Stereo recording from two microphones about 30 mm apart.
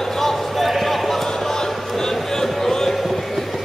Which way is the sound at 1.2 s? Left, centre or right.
Centre.